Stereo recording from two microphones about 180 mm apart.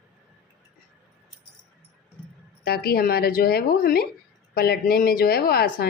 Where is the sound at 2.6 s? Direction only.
60° left (ahead or behind).